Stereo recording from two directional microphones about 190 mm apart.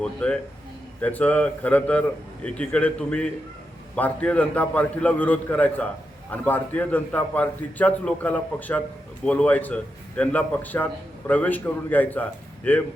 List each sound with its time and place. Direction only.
0.0 s a man's voice: 5° left (ahead or behind)